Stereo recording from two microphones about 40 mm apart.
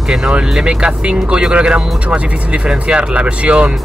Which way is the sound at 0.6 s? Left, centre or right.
Right.